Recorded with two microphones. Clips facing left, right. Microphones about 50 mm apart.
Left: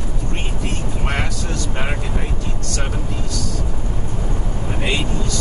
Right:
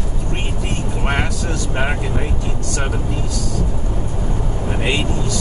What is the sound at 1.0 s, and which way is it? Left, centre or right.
Vehicle, centre.